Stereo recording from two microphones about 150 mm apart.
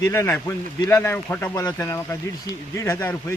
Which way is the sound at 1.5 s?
25° left (ahead or behind).